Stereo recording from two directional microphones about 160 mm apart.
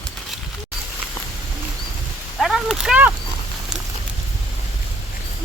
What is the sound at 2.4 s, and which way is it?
Speech, 5° right (ahead or behind).